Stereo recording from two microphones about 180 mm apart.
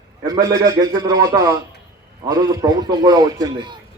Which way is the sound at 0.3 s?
20° right (ahead or behind).